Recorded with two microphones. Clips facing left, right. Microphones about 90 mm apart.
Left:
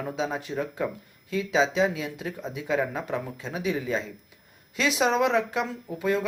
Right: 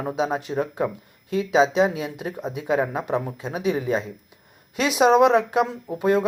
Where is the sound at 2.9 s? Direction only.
20° right (ahead or behind).